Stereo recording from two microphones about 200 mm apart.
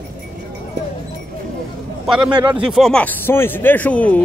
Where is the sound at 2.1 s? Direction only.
5° right (ahead or behind).